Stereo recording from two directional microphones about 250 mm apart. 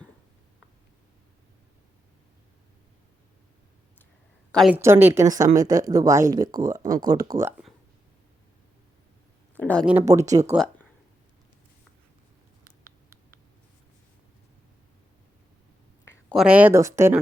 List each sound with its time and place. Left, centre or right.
4.5 s a woman's voice: centre
9.6 s speech: centre
9.9 s a woman's voice: centre
16.0 s speech: centre